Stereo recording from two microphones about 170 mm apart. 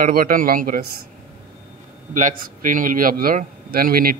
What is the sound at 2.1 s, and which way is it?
A man's voice, 50° right (ahead or behind).